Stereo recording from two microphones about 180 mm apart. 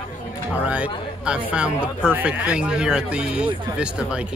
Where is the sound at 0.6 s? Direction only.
5° right (ahead or behind).